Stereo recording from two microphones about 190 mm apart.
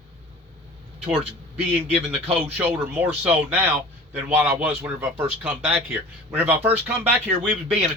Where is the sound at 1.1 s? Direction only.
5° right (ahead or behind).